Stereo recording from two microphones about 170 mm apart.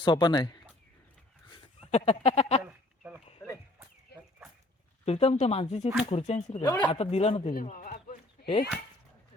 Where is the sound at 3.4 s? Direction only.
15° left (ahead or behind).